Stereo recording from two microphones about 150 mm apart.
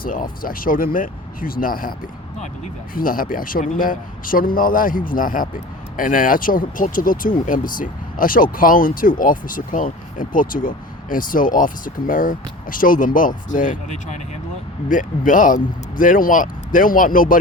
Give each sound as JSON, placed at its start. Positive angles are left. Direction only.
{"t": 0.0, "sound": "speech", "side_deg": 70}